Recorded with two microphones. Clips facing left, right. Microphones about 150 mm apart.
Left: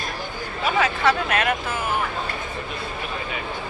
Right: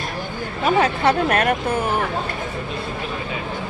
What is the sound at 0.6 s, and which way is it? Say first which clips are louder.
Speech: right 3 dB; 40° right (ahead or behind).